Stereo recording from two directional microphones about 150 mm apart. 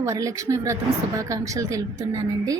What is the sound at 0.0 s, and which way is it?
A woman's voice, 20° right (ahead or behind).